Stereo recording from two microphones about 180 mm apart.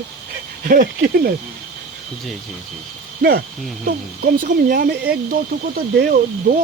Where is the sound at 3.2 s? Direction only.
60° right (ahead or behind).